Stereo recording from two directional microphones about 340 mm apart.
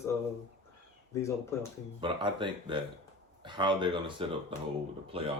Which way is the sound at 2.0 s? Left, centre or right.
Centre.